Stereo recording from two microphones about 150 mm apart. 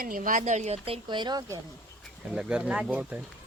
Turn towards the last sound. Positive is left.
turn(degrees=-10)  # may be behind; listen again after turning